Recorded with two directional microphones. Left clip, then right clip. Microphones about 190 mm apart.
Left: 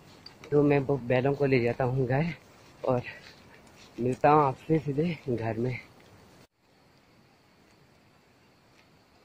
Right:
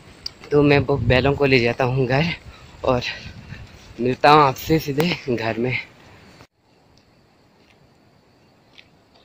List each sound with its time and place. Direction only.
0.2 s speech: 20° right (ahead or behind)